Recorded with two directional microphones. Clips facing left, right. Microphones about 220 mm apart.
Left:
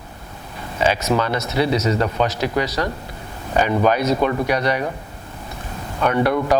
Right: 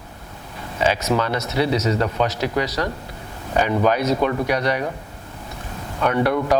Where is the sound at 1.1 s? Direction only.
25° left (ahead or behind).